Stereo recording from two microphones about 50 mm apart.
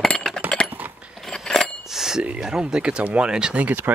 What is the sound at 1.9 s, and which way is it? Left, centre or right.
Bicycle bell, centre.